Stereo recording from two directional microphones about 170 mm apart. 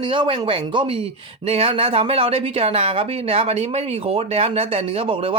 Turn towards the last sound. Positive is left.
turn(degrees=-35)  # may be behind; listen again after turning